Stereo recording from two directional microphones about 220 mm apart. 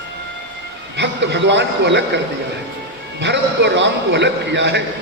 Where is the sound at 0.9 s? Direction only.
55° right (ahead or behind).